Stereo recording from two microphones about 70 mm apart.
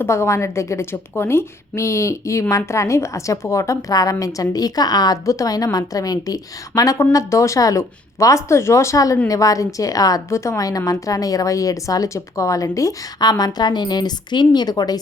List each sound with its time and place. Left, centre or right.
0.0 s a woman's voice: left
10.2 s a woman's voice: left
13.1 s a woman's voice: left